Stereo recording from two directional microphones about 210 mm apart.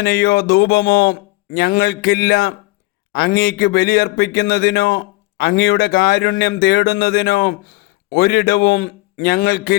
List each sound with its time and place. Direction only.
0.0 s a man's voice: 50° left (ahead or behind)